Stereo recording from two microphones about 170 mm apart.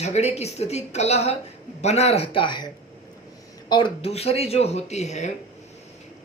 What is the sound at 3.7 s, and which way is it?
A man's voice, 30° left (ahead or behind).